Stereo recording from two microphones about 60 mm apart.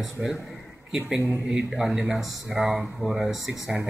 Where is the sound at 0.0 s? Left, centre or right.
Centre.